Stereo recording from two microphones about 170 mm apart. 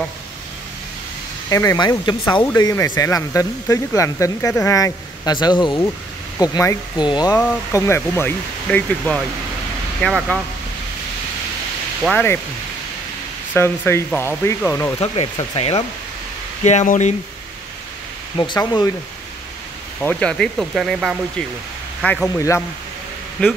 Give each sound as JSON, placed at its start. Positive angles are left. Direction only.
{"t": 1.5, "sound": "speech", "side_deg": 20}
{"t": 12.1, "sound": "speech", "side_deg": 10}
{"t": 13.6, "sound": "speech", "side_deg": 15}
{"t": 15.0, "sound": "speech", "side_deg": 35}
{"t": 16.6, "sound": "speech", "side_deg": 45}
{"t": 18.4, "sound": "speech", "side_deg": 25}
{"t": 20.0, "sound": "speech", "side_deg": 5}
{"t": 23.4, "sound": "speech", "side_deg": 5}